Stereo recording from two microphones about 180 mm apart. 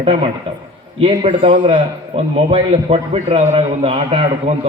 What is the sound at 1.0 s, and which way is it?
A man's voice, 30° right (ahead or behind).